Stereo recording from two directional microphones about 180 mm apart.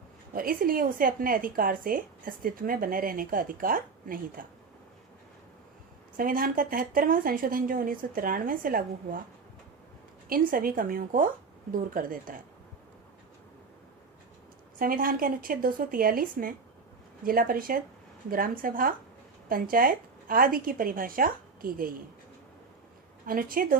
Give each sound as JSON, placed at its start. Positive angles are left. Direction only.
{"t": 0.3, "sound": "a woman's voice", "side_deg": -55}
{"t": 6.1, "sound": "a woman's voice", "side_deg": -50}
{"t": 10.2, "sound": "a woman's voice", "side_deg": -50}
{"t": 14.8, "sound": "a woman's voice", "side_deg": -50}
{"t": 23.2, "sound": "a woman's voice", "side_deg": -50}